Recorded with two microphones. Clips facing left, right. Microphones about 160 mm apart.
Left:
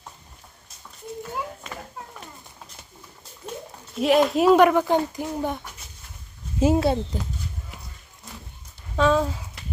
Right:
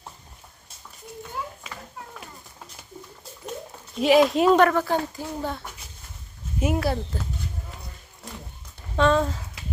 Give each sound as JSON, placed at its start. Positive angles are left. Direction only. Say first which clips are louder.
{"t": 3.9, "sound": "speech", "louder": "right 1 dB", "side_deg": 0}
{"t": 4.6, "sound": "speech", "louder": "left 3 dB", "side_deg": 15}
{"t": 6.6, "sound": "speech", "louder": "left 5 dB", "side_deg": 25}
{"t": 9.0, "sound": "speech", "louder": "even", "side_deg": 5}